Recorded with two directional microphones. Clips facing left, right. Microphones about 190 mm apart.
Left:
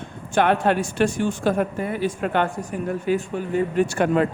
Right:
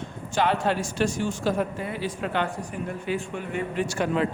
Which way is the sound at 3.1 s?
40° left (ahead or behind).